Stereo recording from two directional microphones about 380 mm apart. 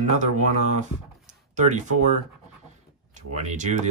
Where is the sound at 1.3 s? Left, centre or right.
Centre.